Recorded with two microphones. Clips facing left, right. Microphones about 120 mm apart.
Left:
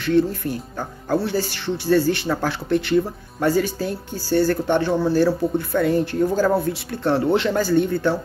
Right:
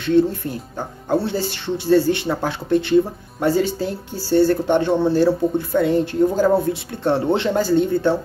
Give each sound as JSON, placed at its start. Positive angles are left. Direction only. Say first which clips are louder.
{"t": 0.0, "sound": "speech", "louder": "right 2 dB", "side_deg": -25}